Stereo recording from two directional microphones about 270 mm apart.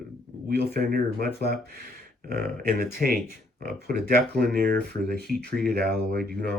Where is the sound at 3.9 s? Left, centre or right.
Right.